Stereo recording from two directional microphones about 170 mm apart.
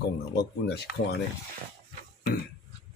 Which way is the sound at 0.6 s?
80° left.